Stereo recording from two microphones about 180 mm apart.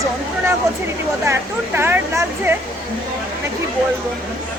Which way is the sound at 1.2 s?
15° right (ahead or behind).